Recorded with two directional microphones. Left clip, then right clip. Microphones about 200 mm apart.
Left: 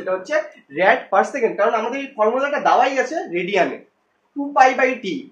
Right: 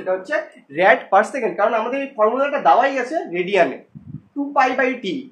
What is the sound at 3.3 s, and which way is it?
Speech, 35° right (ahead or behind).